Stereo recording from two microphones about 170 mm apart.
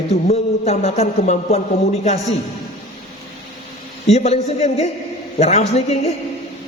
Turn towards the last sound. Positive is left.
turn(degrees=40)  # may be behind; listen again after turning